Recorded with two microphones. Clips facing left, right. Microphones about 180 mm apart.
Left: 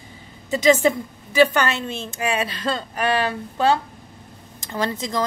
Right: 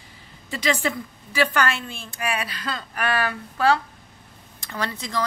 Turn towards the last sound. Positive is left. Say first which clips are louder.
# left 4 dB
turn(degrees=20)  # may be behind; listen again after turning